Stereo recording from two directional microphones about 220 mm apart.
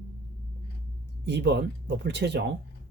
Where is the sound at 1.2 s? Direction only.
50° right (ahead or behind).